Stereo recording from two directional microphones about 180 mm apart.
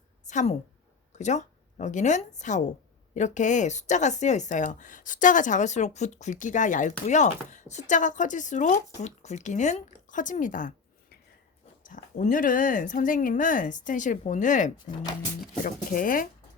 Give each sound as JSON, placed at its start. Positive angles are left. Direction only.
{"t": 0.3, "sound": "speech", "side_deg": 40}